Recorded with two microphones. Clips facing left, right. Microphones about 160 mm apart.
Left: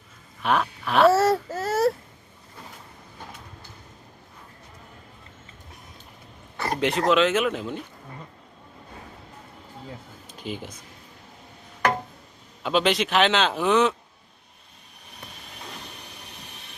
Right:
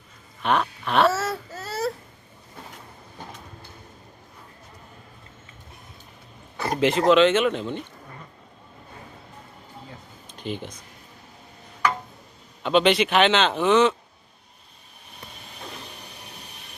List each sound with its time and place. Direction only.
0.4 s speech: centre (ahead or behind)
1.1 s baby cry: 40° left (ahead or behind)
6.6 s speech: centre (ahead or behind)
10.3 s speech: 5° left (ahead or behind)
12.6 s speech: centre (ahead or behind)